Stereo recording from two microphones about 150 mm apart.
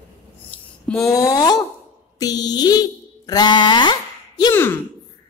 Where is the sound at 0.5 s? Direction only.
10° left (ahead or behind).